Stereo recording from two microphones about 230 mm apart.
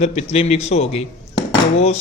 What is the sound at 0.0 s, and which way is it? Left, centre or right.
A man's voice, left.